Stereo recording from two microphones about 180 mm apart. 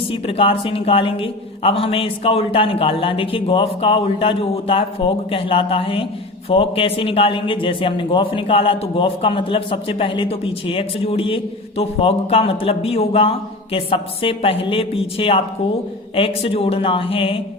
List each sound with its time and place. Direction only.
0.1 s a woman's voice: 30° left (ahead or behind)